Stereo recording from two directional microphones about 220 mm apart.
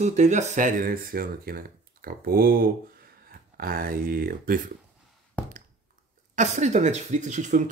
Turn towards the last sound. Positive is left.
turn(degrees=-35)  # may be behind; listen again after turning